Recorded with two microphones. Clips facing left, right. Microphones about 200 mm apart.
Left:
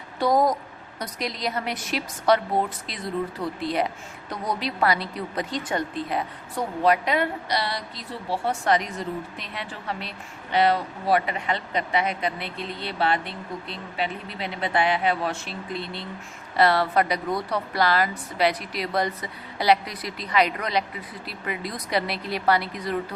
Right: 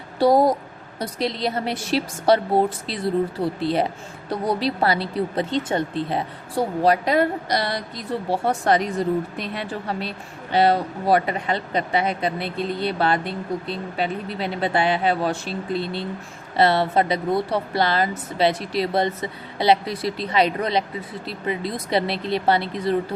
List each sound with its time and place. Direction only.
0.2 s a woman's voice: 30° right (ahead or behind)